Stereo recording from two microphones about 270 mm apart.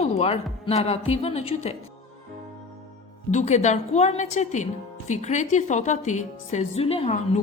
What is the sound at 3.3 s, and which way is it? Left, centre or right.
A woman's voice, left.